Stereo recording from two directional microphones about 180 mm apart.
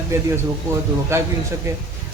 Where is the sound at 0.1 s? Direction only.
15° right (ahead or behind).